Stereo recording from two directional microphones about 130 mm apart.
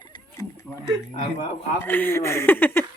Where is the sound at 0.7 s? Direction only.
10° left (ahead or behind).